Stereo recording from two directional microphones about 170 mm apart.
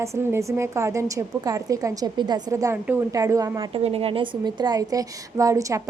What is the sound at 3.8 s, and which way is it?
A woman's voice, 35° right (ahead or behind).